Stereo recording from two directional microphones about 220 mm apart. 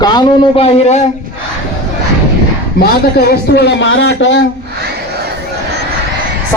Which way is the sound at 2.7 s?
45° left (ahead or behind).